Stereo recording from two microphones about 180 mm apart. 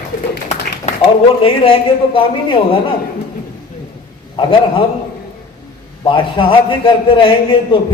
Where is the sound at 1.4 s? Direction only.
30° left (ahead or behind).